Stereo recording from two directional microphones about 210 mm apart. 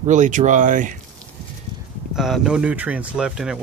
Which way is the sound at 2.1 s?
Centre (ahead or behind).